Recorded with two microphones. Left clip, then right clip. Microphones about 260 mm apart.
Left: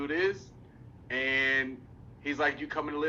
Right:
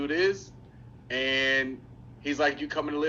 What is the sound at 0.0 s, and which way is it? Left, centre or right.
A man's voice, centre.